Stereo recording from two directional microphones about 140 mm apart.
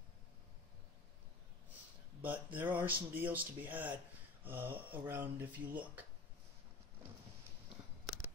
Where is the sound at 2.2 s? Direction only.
15° right (ahead or behind).